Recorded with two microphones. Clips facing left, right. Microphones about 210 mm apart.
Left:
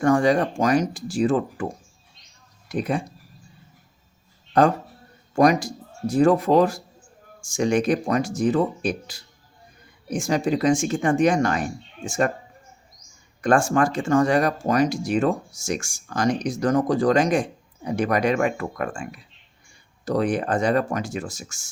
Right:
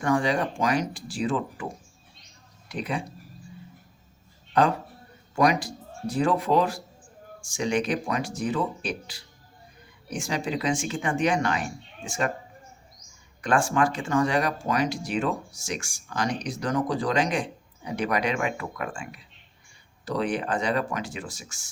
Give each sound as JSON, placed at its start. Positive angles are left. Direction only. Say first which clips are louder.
{"t": 0.0, "sound": "speech", "louder": "left 6 dB", "side_deg": 45}
{"t": 2.6, "sound": "speech", "louder": "left 6 dB", "side_deg": 45}
{"t": 5.3, "sound": "speech", "louder": "left 5 dB", "side_deg": 45}
{"t": 13.4, "sound": "speech", "louder": "left 4 dB", "side_deg": 45}